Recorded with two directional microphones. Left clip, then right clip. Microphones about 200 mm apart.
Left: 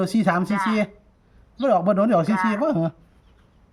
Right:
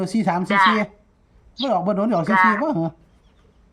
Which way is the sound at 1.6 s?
15° left (ahead or behind).